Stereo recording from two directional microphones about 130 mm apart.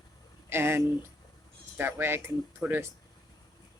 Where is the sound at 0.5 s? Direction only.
20° right (ahead or behind).